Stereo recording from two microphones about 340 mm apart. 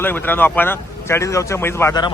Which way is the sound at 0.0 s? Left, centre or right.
Centre.